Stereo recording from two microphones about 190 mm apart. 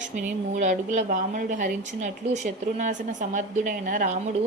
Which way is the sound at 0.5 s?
40° right (ahead or behind).